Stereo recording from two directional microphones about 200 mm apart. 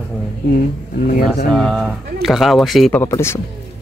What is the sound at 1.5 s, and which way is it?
Speech, centre (ahead or behind).